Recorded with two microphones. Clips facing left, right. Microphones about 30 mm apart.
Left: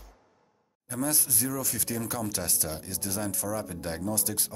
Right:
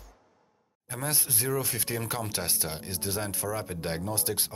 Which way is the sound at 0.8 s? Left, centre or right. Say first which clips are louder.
Left 2 dB; right.